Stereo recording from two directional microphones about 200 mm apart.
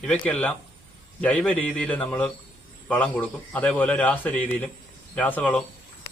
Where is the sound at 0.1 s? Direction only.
5° left (ahead or behind).